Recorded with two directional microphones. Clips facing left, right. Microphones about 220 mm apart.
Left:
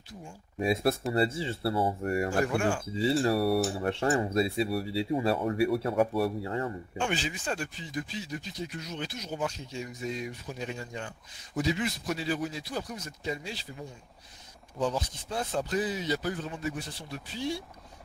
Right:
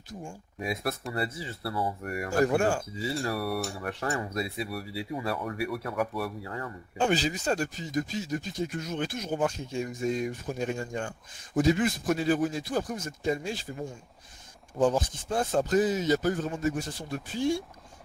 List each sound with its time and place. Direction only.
0.6 s speech: 25° left (ahead or behind)
2.4 s speech: 40° right (ahead or behind)
2.9 s speech: 25° left (ahead or behind)
7.0 s speech: 40° right (ahead or behind)